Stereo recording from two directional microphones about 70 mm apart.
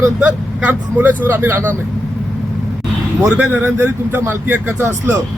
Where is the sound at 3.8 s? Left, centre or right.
Right.